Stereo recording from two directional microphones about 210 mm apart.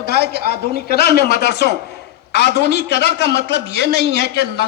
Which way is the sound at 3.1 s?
55° right (ahead or behind).